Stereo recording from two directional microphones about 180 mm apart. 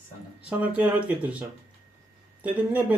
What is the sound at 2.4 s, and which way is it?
Speech, 10° right (ahead or behind).